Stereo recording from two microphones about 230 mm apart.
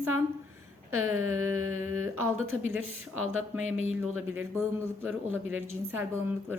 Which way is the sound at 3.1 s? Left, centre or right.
Right.